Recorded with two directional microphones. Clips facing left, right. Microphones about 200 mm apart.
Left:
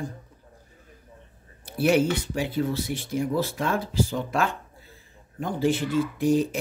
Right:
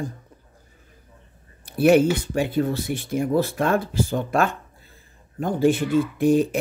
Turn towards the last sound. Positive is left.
turn(degrees=-55)  # may be behind; listen again after turning